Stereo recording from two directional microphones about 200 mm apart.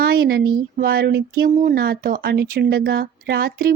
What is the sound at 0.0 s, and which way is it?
Speech, 50° right (ahead or behind).